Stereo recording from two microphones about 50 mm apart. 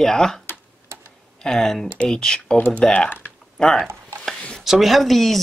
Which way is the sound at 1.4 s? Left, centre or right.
Centre.